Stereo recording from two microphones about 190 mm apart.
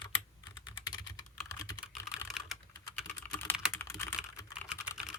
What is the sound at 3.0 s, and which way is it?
Typing, 10° left (ahead or behind).